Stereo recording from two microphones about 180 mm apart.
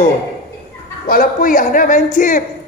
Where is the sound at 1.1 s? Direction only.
50° left (ahead or behind).